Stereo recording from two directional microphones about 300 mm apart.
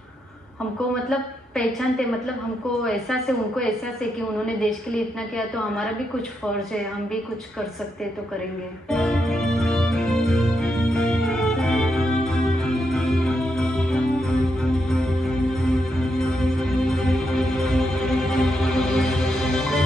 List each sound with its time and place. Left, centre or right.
1.6 s a woman's voice: centre
8.9 s music: centre